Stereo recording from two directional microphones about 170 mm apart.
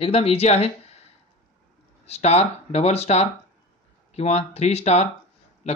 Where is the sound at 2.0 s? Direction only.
40° left (ahead or behind).